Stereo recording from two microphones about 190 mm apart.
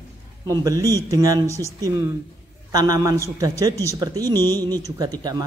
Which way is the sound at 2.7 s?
20° right (ahead or behind).